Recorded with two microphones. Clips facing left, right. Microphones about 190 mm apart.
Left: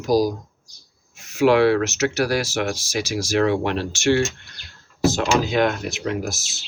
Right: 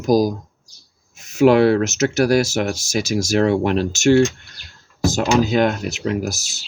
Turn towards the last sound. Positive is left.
turn(degrees=-40)  # may be behind; listen again after turning